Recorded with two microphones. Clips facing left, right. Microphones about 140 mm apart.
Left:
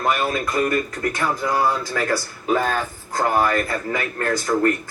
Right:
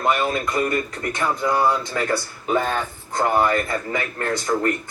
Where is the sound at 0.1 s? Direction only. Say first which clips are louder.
Right 1 dB; 25° right (ahead or behind).